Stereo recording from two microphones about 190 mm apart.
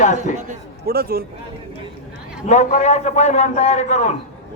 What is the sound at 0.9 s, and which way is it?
Speech, 55° right (ahead or behind).